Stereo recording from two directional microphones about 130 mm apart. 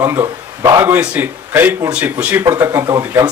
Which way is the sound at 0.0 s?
20° right (ahead or behind).